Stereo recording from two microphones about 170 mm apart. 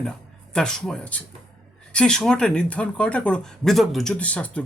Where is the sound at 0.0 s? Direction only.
5° left (ahead or behind).